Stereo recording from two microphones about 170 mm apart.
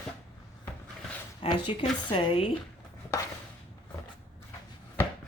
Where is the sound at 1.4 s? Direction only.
30° left (ahead or behind).